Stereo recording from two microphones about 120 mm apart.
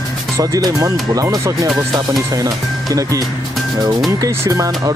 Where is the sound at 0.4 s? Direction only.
30° right (ahead or behind).